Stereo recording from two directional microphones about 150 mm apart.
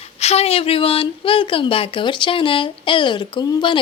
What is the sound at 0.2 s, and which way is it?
A woman's voice, 45° left (ahead or behind).